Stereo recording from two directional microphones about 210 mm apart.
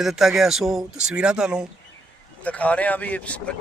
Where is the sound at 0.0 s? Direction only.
Centre (ahead or behind).